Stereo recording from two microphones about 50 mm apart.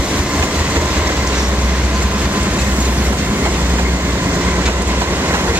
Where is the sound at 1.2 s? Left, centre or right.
Right.